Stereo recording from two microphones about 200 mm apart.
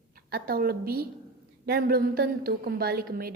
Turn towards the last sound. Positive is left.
turn(degrees=-50)  # may be behind; listen again after turning